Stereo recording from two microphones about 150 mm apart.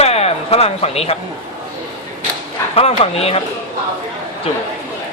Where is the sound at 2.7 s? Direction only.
40° left (ahead or behind).